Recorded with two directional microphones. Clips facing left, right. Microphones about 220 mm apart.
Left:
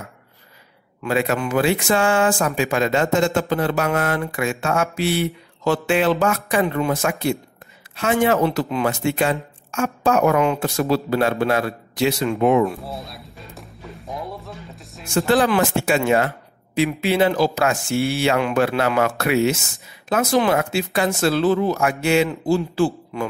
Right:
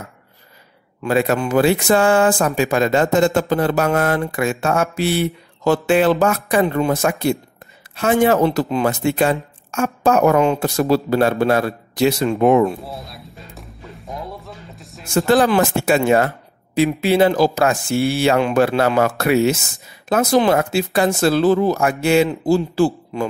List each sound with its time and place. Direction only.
1.0 s speech: 40° right (ahead or behind)
12.8 s music: centre (ahead or behind)
15.2 s speech: 40° right (ahead or behind)